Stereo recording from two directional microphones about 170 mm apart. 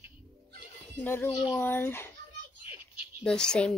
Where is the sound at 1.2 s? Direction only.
25° left (ahead or behind).